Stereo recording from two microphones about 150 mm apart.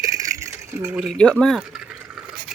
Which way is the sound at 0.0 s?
20° right (ahead or behind).